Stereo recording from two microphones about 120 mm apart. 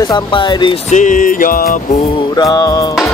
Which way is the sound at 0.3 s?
45° left (ahead or behind).